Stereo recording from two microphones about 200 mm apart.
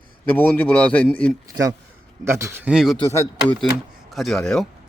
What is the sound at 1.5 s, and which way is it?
A man's voice, 20° right (ahead or behind).